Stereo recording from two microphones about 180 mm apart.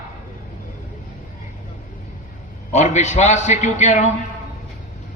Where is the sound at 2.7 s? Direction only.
40° left (ahead or behind).